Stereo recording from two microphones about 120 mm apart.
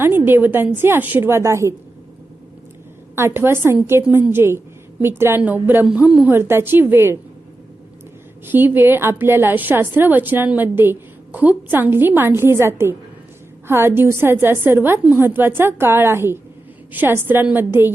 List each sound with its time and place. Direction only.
0.0 s a woman's voice: 20° right (ahead or behind)
3.2 s a woman's voice: 20° right (ahead or behind)
6.3 s a woman's voice: 20° right (ahead or behind)
8.4 s a woman's voice: 15° right (ahead or behind)